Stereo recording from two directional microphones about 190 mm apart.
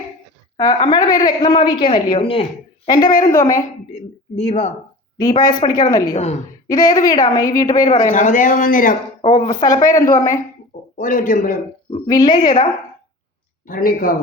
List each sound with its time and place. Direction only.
0.5 s a woman's voice: 25° left (ahead or behind)
3.9 s a man's voice: 30° left (ahead or behind)
5.2 s a woman's voice: 20° left (ahead or behind)
6.1 s a woman's voice: 35° left (ahead or behind)
6.7 s a woman's voice: 20° left (ahead or behind)
7.9 s speech: 45° left (ahead or behind)
9.2 s a woman's voice: 25° left (ahead or behind)
10.9 s speech: 45° left (ahead or behind)
11.9 s a woman's voice: 25° left (ahead or behind)
13.7 s speech: 50° left (ahead or behind)